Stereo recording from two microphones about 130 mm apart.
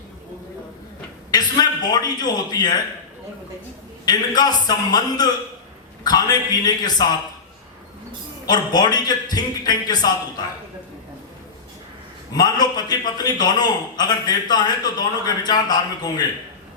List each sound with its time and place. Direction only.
1.3 s a man's voice: 30° left (ahead or behind)
4.0 s a man's voice: 30° left (ahead or behind)
8.4 s a man's voice: 30° left (ahead or behind)
12.3 s a man's voice: 30° left (ahead or behind)